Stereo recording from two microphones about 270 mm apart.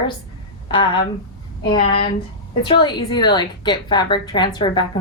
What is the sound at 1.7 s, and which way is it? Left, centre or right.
A woman's voice, centre.